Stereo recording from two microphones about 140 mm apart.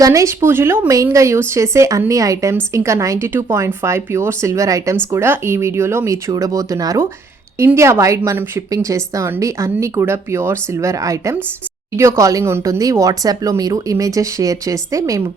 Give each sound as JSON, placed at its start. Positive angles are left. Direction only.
{"t": 0.0, "sound": "a woman's voice", "side_deg": -20}